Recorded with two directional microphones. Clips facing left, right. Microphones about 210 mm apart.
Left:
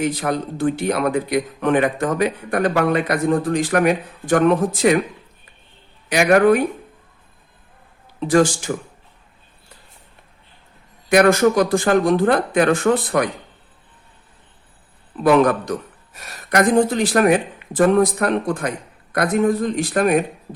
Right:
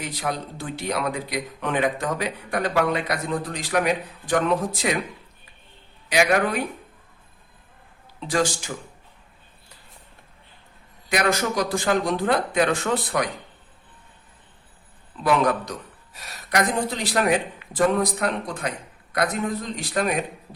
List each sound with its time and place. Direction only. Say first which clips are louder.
0.0 s a man's voice: left 8 dB; 50° left (ahead or behind)
6.1 s a man's voice: left 7 dB; 50° left (ahead or behind)
8.3 s a man's voice: left 8 dB; 50° left (ahead or behind)
11.1 s a man's voice: left 10 dB; 55° left (ahead or behind)
15.2 s a man's voice: left 7 dB; 50° left (ahead or behind)